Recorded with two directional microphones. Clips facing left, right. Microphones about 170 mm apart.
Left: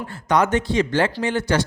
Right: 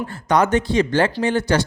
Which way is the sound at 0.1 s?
40° right (ahead or behind).